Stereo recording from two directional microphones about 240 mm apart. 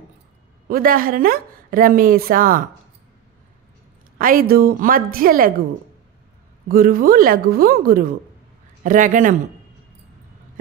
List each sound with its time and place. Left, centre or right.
0.7 s a woman's voice: right
4.2 s a woman's voice: right
6.7 s a woman's voice: right